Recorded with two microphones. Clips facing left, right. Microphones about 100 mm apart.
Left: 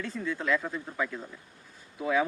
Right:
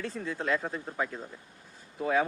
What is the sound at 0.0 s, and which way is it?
Speech, 35° right (ahead or behind).